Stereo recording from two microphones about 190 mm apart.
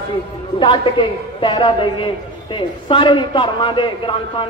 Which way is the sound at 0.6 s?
25° left (ahead or behind).